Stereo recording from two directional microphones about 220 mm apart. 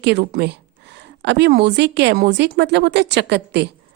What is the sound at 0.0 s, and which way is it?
A woman's voice, 50° right (ahead or behind).